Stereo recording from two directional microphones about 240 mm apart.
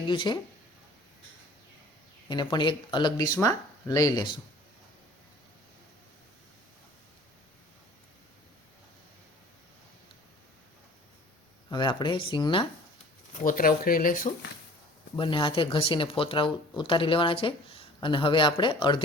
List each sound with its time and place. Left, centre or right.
0.1 s speech: centre
2.3 s speech: centre
11.7 s speech: centre
13.4 s speech: left
15.1 s speech: left